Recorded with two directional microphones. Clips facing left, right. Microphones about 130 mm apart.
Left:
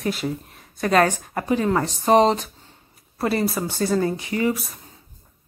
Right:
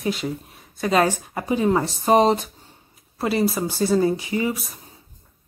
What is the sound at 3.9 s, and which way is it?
Speech, 20° right (ahead or behind).